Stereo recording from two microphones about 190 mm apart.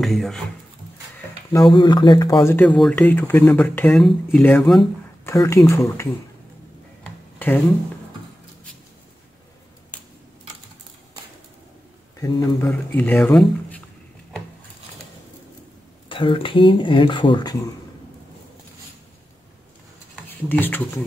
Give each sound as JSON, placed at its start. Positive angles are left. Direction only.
{"t": 0.0, "sound": "speech", "side_deg": 0}
{"t": 1.7, "sound": "speech", "side_deg": 25}
{"t": 7.0, "sound": "a sound", "side_deg": 10}
{"t": 12.2, "sound": "speech", "side_deg": 15}
{"t": 16.1, "sound": "speech", "side_deg": 25}
{"t": 20.4, "sound": "speech", "side_deg": 10}